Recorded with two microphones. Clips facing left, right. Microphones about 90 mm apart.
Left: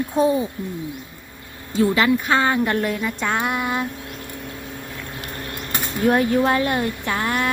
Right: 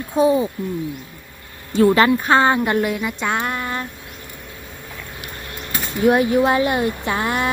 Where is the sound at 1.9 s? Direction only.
40° right (ahead or behind).